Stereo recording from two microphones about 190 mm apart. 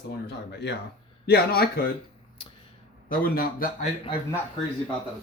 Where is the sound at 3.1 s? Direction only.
50° left (ahead or behind).